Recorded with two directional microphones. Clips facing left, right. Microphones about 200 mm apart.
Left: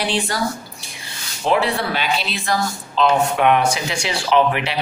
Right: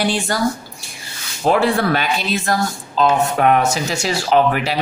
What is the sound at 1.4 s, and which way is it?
Speech, 50° right (ahead or behind).